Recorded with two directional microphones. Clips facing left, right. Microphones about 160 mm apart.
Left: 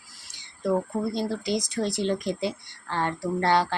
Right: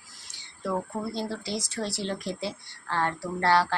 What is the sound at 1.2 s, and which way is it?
Speech, 15° left (ahead or behind).